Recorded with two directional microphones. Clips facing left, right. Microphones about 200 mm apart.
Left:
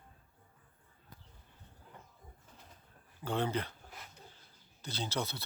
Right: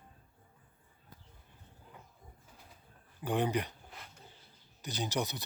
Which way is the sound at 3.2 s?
15° right (ahead or behind).